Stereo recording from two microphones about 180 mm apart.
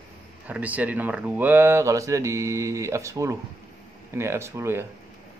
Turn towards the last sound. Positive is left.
turn(degrees=-15)  # may be behind; listen again after turning